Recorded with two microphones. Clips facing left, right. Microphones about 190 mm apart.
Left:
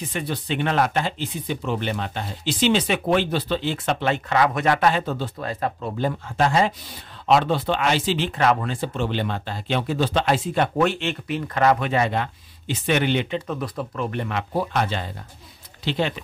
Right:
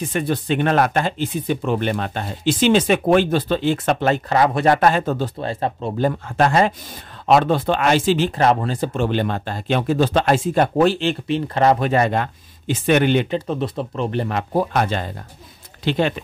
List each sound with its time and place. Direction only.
0.1 s speech: 50° right (ahead or behind)
5.4 s speech: 30° right (ahead or behind)
5.9 s speech: 50° right (ahead or behind); by 11.9 s 30° right (ahead or behind)
11.9 s speech: 50° right (ahead or behind)
13.5 s speech: 25° right (ahead or behind); by 16.2 s 55° right (ahead or behind)